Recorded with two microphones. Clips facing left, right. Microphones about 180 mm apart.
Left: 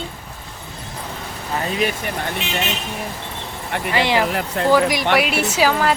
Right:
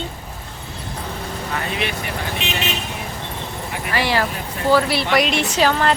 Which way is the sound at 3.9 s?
20° left (ahead or behind).